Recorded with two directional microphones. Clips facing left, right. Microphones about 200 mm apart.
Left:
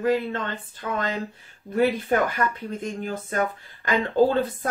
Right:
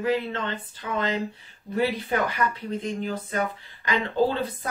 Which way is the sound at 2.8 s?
50° left (ahead or behind).